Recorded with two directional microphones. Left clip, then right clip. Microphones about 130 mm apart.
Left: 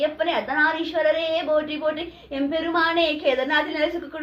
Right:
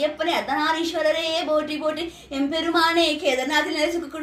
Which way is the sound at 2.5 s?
20° left (ahead or behind).